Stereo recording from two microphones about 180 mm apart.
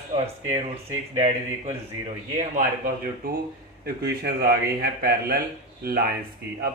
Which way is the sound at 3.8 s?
60° right (ahead or behind).